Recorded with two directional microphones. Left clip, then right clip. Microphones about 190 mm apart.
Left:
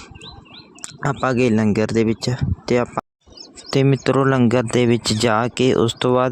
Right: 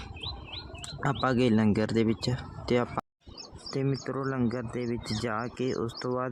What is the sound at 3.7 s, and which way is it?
Speech, 50° left (ahead or behind).